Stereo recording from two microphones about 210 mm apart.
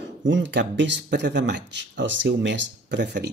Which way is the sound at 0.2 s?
60° right (ahead or behind).